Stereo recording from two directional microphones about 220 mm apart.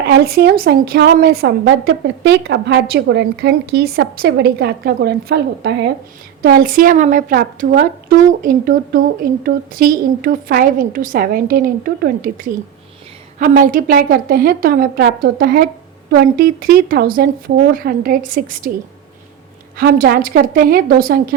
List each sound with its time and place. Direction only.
0.0 s a woman's voice: 45° right (ahead or behind)
19.7 s a woman's voice: 40° right (ahead or behind)